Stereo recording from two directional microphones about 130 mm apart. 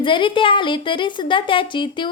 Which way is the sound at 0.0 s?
40° left (ahead or behind).